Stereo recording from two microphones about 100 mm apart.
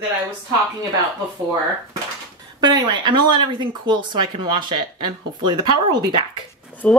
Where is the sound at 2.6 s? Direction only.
45° right (ahead or behind).